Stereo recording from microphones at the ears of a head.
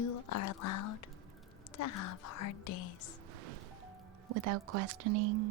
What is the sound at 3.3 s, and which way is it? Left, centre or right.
Music, right.